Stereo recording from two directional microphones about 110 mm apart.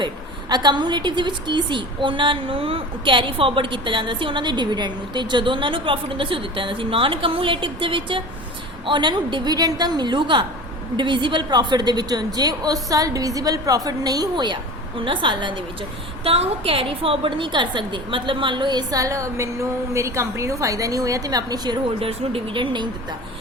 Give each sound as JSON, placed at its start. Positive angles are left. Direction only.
{"t": 0.0, "sound": "a woman's voice", "side_deg": -40}
{"t": 16.2, "sound": "a woman's voice", "side_deg": -60}
{"t": 22.0, "sound": "a woman's voice", "side_deg": -55}